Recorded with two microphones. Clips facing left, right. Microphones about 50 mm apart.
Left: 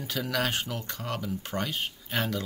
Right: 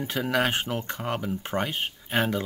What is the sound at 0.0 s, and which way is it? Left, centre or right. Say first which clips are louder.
Speech: right 4 dB; right.